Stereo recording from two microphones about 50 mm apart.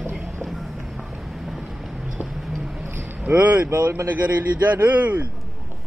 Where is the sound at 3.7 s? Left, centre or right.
Right.